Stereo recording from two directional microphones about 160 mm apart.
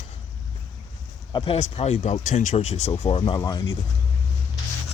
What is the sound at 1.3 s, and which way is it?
Speech, 35° left (ahead or behind).